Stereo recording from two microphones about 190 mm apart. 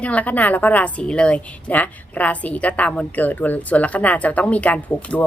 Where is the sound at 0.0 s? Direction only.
10° left (ahead or behind).